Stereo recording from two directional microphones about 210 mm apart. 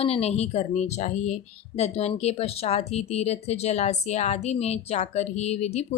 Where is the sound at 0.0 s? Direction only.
30° left (ahead or behind).